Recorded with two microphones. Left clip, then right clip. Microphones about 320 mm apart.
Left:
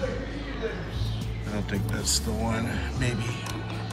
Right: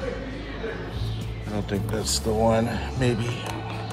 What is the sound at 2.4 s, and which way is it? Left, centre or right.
Speech, centre.